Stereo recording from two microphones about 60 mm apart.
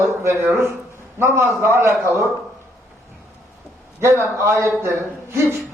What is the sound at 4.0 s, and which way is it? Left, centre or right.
A man's voice, right.